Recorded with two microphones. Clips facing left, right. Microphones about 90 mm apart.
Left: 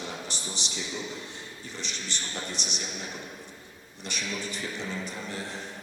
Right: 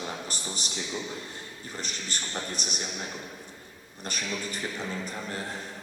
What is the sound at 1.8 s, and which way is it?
Speech, 45° right (ahead or behind).